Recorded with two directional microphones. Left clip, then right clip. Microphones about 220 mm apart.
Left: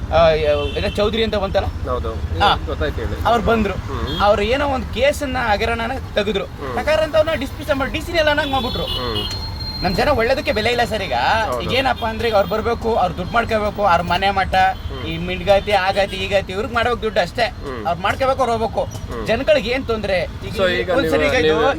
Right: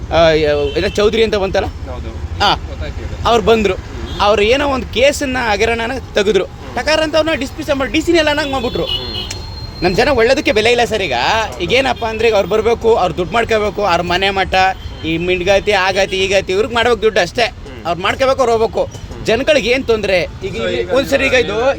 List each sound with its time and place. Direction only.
0.1 s speech: 50° right (ahead or behind)
3.2 s speech: 50° right (ahead or behind)
9.8 s speech: 50° right (ahead or behind)